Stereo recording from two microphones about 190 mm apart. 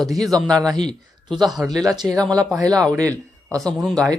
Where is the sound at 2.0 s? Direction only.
Centre (ahead or behind).